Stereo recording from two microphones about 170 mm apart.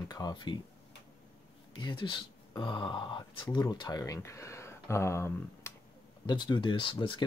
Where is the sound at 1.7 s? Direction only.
25° left (ahead or behind).